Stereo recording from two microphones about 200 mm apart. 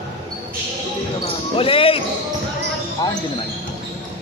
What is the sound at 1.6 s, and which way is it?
Speech, 30° left (ahead or behind).